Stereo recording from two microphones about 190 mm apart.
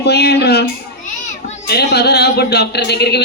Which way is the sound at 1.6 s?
60° left (ahead or behind).